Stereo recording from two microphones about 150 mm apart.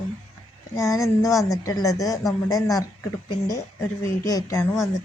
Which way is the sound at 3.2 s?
20° left (ahead or behind).